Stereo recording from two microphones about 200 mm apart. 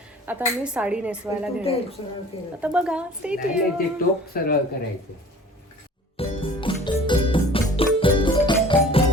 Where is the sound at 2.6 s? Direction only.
5° right (ahead or behind).